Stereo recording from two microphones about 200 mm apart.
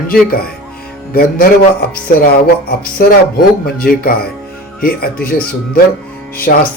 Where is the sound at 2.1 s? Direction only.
50° left (ahead or behind).